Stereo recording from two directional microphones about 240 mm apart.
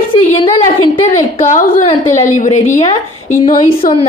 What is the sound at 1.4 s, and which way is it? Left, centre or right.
A woman's voice, left.